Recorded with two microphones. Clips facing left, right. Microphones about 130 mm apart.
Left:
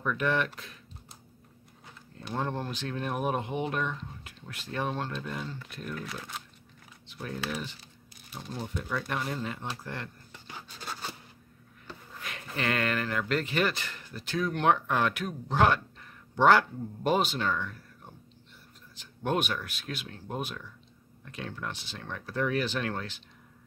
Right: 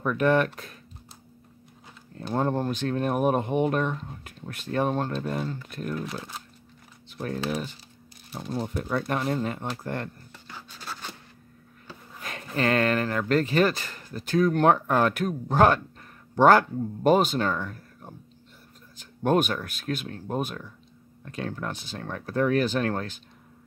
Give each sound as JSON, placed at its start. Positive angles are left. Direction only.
{"t": 0.0, "sound": "speech", "side_deg": -45}
{"t": 2.3, "sound": "speech", "side_deg": -45}
{"t": 7.1, "sound": "speech", "side_deg": -45}
{"t": 12.2, "sound": "a sound", "side_deg": -40}
{"t": 12.5, "sound": "speech", "side_deg": -40}